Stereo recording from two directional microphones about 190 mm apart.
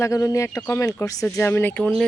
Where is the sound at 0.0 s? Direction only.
15° left (ahead or behind).